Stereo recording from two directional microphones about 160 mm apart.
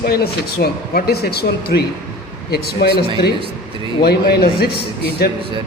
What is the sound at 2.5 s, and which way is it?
Speech, 85° left.